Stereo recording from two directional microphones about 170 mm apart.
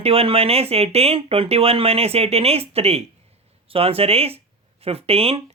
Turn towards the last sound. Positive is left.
turn(degrees=-35)  # may be behind; listen again after turning